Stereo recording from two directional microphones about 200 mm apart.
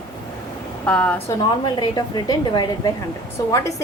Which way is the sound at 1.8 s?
20° left (ahead or behind).